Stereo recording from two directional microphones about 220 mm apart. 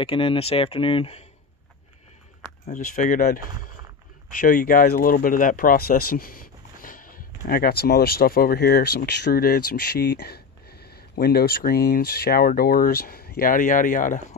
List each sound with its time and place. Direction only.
0.0 s speech: 25° left (ahead or behind)
2.6 s speech: 35° left (ahead or behind)